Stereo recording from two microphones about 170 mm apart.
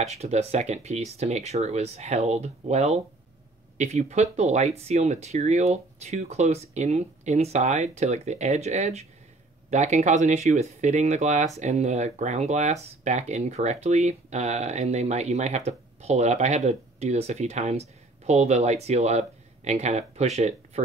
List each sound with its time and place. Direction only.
0.0 s speech: 40° right (ahead or behind)